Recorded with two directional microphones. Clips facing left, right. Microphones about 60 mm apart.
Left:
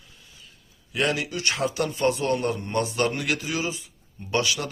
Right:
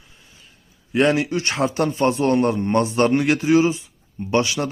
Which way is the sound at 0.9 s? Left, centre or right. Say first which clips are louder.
Right 8 dB; right.